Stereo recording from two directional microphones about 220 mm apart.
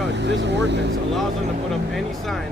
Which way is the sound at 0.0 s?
50° right (ahead or behind).